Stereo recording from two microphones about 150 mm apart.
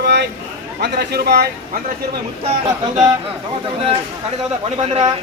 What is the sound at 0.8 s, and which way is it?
Speech, 90° right.